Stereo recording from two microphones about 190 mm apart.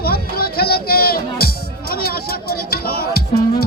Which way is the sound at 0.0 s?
55° left (ahead or behind).